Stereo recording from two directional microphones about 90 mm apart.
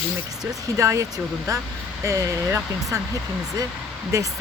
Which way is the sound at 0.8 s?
35° right (ahead or behind).